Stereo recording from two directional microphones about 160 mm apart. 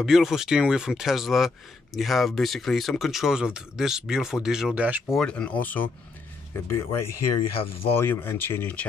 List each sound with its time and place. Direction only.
0.0 s speech: 5° right (ahead or behind)
5.2 s speech: 5° left (ahead or behind)